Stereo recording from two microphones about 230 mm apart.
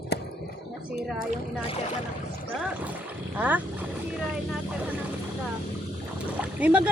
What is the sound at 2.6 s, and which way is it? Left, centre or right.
Speech, centre.